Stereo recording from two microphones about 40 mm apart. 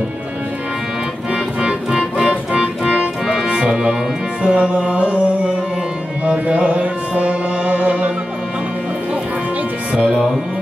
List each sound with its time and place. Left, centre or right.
1.3 s music: right
2.2 s music: right
3.5 s music: centre
6.3 s music: right